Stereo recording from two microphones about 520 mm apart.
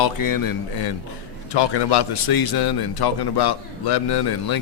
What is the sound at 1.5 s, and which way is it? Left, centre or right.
A man's voice, left.